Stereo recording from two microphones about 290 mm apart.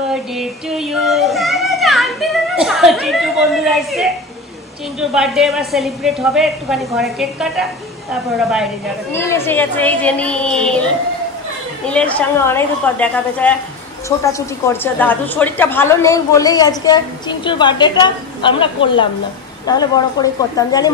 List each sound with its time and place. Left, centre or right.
0.1 s child singing: centre
5.1 s a woman's voice: centre
11.9 s a woman's voice: centre